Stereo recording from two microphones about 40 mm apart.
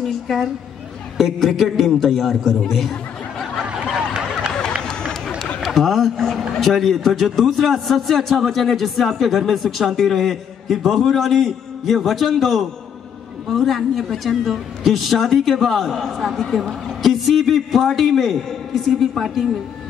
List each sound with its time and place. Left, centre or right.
0.0 s a man's voice: centre
4.8 s a sound: centre
5.9 s a man's voice: centre